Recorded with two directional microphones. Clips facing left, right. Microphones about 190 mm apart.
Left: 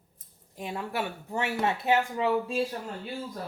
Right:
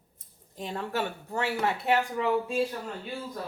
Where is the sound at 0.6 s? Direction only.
10° left (ahead or behind); by 2.5 s 25° left (ahead or behind).